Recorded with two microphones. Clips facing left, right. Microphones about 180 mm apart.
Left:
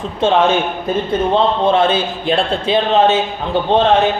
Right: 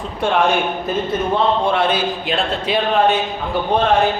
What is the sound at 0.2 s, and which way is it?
A man's voice, 25° left (ahead or behind).